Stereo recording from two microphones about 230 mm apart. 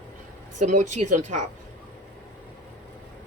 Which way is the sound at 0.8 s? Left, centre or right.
Right.